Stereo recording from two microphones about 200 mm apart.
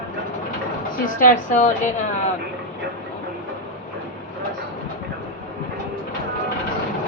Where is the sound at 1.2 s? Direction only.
40° left (ahead or behind).